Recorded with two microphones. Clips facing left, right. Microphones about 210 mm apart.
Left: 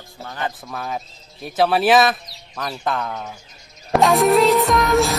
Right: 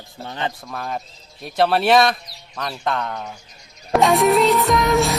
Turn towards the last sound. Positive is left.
turn(degrees=0)  # may be behind; listen again after turning